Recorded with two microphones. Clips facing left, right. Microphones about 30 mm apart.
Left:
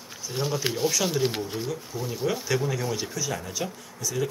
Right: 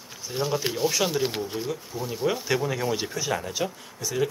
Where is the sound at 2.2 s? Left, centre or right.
Centre.